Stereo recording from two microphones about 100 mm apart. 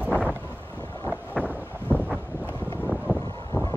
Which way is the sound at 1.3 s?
20° right (ahead or behind).